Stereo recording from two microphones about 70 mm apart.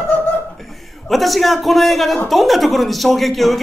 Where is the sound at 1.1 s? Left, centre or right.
Centre.